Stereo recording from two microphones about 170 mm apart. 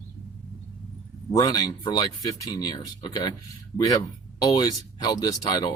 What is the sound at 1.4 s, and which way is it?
Speech, 25° left (ahead or behind).